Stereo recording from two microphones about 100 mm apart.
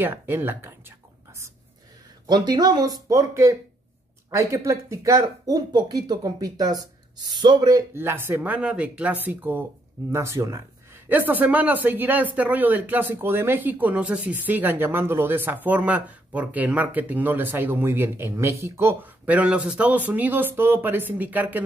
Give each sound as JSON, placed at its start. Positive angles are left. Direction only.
{"t": 0.0, "sound": "whispering", "side_deg": -20}
{"t": 2.2, "sound": "a man's voice", "side_deg": -45}
{"t": 7.9, "sound": "speech", "side_deg": -25}
{"t": 11.1, "sound": "speech", "side_deg": -20}
{"t": 19.2, "sound": "speech", "side_deg": -15}